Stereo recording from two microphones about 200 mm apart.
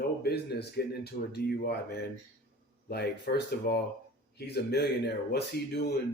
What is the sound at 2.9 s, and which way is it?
Speech, 55° left (ahead or behind).